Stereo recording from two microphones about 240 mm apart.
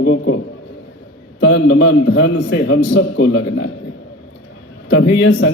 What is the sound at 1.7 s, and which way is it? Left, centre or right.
Speech, left.